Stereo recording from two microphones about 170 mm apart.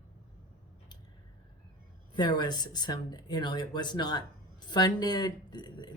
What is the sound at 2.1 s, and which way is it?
Speech, 25° left (ahead or behind).